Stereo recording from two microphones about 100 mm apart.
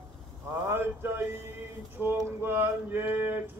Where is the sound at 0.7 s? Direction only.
25° right (ahead or behind).